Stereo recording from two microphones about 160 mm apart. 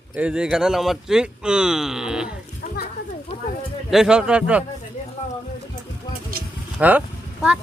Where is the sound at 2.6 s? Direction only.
50° left (ahead or behind).